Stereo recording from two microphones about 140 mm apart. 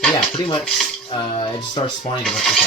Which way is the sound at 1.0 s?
35° left (ahead or behind).